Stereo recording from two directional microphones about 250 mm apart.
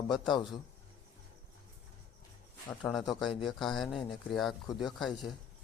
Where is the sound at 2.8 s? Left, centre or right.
Centre.